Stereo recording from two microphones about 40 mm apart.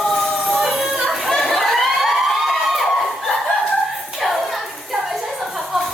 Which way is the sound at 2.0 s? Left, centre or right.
Centre.